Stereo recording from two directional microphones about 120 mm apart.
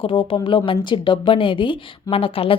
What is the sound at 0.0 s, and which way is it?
A woman's voice, 45° left (ahead or behind).